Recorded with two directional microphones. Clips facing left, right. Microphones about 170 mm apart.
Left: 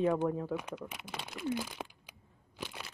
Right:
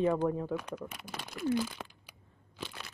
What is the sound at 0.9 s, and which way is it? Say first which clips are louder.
Speech: even; 20° left (ahead or behind).